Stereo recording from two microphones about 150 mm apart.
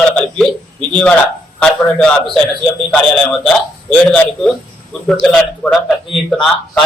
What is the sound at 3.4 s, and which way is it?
A man's voice, 5° left (ahead or behind).